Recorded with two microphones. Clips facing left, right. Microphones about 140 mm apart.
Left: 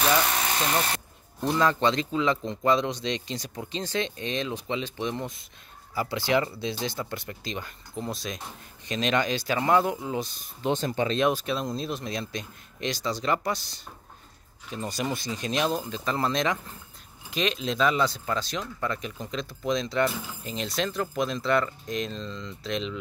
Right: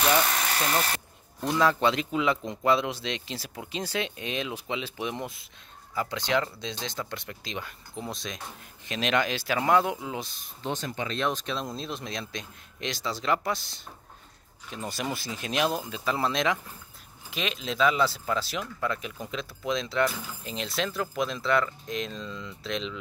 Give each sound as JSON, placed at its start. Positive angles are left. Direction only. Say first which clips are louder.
{"t": 1.4, "sound": "speech", "louder": "even", "side_deg": 0}
{"t": 5.9, "sound": "speech", "louder": "left 2 dB", "side_deg": 5}
{"t": 10.7, "sound": "speech", "louder": "left 6 dB", "side_deg": 30}
{"t": 11.1, "sound": "speech", "louder": "left 1 dB", "side_deg": 10}